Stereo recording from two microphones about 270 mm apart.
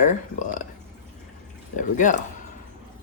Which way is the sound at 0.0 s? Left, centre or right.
Left.